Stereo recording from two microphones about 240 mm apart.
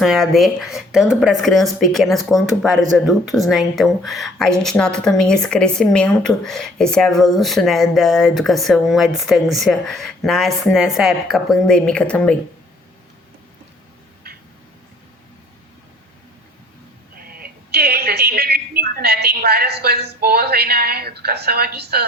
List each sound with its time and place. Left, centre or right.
0.0 s speech: centre
17.2 s a woman's voice: right